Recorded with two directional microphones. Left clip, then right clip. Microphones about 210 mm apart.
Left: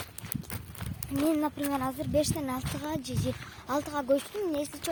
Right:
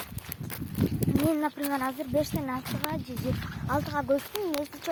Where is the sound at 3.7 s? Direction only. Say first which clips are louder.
Right 1 dB; 5° left (ahead or behind).